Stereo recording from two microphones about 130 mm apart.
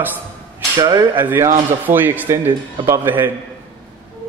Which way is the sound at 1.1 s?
15° right (ahead or behind).